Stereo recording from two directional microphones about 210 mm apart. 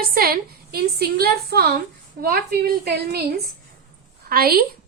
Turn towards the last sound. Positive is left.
turn(degrees=-45)  # may be behind; listen again after turning